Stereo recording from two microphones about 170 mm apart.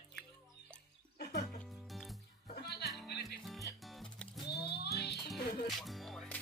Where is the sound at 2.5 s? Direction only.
70° left (ahead or behind).